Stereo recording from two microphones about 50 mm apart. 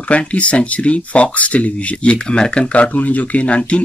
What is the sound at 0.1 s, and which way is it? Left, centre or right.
Speech, left.